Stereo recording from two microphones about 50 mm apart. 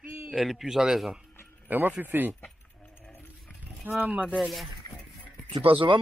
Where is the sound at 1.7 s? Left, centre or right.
Right.